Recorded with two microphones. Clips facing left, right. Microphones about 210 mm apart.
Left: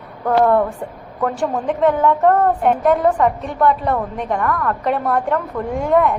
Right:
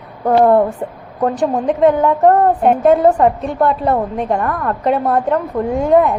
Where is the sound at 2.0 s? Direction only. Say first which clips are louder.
Right 3 dB; 40° right (ahead or behind).